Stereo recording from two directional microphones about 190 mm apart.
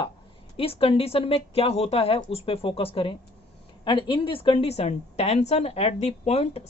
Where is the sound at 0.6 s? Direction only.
30° left (ahead or behind).